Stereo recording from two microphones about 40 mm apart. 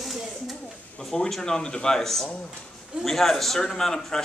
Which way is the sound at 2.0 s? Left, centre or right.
Centre.